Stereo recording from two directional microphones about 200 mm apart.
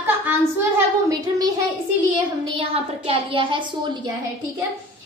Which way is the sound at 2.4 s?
25° right (ahead or behind).